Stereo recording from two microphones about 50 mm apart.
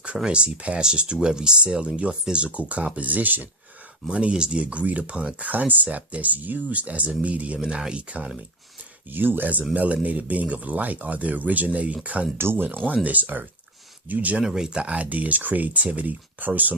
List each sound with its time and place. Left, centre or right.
0.3 s speech: right
4.1 s speech: right
5.5 s speech: right
7.6 s speech: centre
9.0 s speech: right
12.4 s speech: right
12.6 s speech: right
14.4 s speech: centre; by 16.7 s right